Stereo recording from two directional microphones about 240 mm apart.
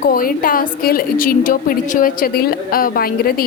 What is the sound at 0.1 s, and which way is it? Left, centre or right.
A woman's voice, left.